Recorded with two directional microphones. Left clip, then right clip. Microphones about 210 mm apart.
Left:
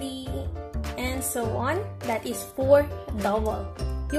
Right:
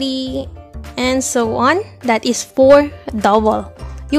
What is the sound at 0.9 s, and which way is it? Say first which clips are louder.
Music: right 14 dB; 45° right (ahead or behind).